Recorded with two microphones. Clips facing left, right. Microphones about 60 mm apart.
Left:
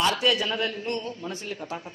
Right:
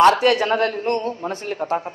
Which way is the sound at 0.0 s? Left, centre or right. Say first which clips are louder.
Right 10 dB; right.